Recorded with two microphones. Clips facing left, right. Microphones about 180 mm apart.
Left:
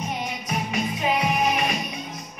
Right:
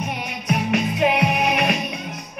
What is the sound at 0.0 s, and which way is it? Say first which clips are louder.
Music: right 1 dB; 65° right (ahead or behind).